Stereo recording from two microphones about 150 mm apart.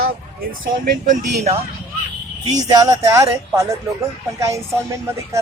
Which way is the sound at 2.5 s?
25° right (ahead or behind).